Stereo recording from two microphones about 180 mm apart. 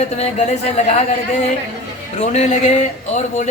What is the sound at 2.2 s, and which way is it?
Speech, 40° left (ahead or behind).